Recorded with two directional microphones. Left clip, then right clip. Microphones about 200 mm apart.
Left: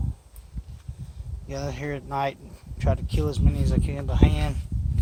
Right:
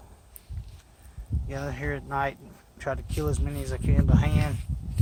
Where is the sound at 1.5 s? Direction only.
5° left (ahead or behind).